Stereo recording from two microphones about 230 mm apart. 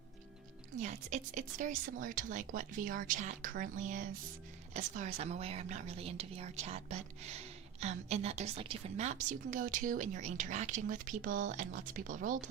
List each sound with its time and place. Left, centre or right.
0.8 s a woman's voice: right